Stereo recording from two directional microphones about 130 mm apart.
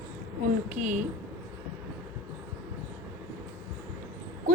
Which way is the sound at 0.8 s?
75° right (ahead or behind).